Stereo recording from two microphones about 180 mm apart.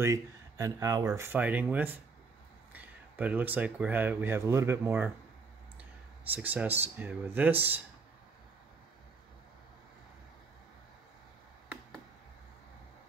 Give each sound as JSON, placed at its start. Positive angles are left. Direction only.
{"t": 0.0, "sound": "speech", "side_deg": -15}
{"t": 6.3, "sound": "speech", "side_deg": -10}